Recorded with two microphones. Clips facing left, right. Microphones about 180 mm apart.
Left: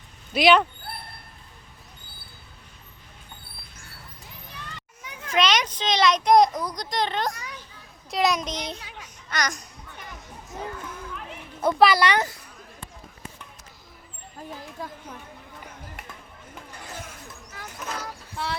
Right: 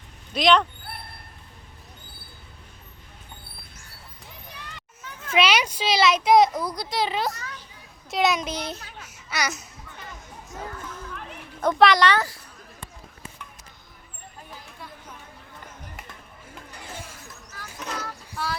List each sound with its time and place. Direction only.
0.3 s speech: 5° left (ahead or behind)
5.3 s speech: 5° right (ahead or behind)
7.3 s children playing: 15° left (ahead or behind)
8.1 s speech: centre (ahead or behind)
9.0 s babbling: 10° right (ahead or behind)
10.6 s music: 10° left (ahead or behind)
11.6 s speech: 5° left (ahead or behind)
18.0 s a sound: 25° left (ahead or behind)